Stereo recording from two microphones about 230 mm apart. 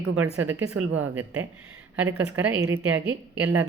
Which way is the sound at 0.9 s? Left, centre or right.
Centre.